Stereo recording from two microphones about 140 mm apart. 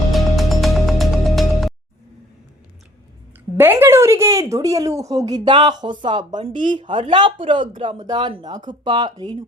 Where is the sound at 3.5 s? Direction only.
15° right (ahead or behind).